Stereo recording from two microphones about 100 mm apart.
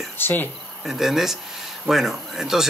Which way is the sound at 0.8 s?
5° right (ahead or behind).